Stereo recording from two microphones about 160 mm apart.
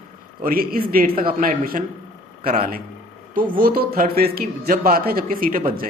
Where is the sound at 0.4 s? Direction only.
65° right (ahead or behind).